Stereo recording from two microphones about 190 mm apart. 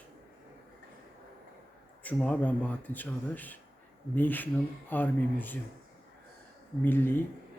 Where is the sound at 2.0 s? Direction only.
5° left (ahead or behind).